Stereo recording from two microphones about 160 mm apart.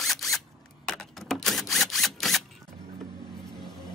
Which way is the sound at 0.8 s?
Centre (ahead or behind).